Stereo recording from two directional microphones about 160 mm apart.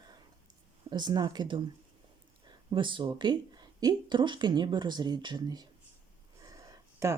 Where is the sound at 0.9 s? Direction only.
25° right (ahead or behind).